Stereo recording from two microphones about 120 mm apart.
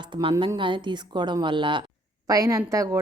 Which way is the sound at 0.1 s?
40° right (ahead or behind).